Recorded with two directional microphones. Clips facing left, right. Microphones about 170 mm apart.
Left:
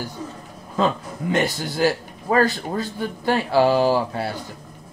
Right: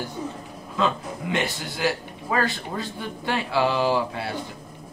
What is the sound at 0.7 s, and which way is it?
A man's voice, 40° left (ahead or behind).